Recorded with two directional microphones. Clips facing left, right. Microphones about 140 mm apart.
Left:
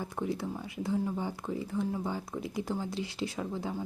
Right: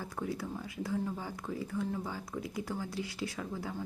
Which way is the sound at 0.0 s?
25° left (ahead or behind).